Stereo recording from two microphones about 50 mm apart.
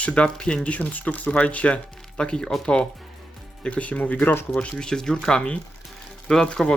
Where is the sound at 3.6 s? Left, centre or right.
Left.